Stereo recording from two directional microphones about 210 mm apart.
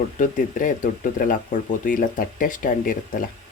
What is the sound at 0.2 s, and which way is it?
Speech, 40° left (ahead or behind).